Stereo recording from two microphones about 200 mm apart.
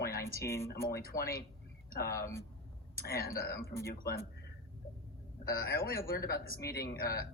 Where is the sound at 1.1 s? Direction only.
45° left (ahead or behind).